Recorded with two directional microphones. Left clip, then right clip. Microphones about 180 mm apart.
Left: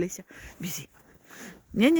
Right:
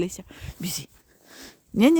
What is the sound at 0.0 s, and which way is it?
Speech, 30° right (ahead or behind).